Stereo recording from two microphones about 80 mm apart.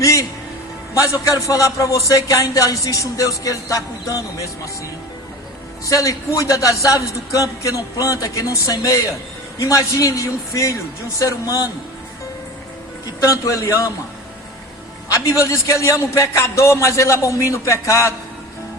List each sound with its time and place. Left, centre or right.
0.0 s music: left
1.0 s speech: left
5.8 s speech: left
13.1 s speech: left
15.1 s a man's voice: left